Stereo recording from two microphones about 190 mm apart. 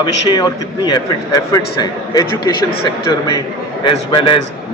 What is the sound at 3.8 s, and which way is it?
Speech, 25° left (ahead or behind).